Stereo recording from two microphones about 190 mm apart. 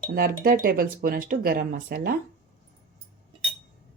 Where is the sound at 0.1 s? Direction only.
50° right (ahead or behind).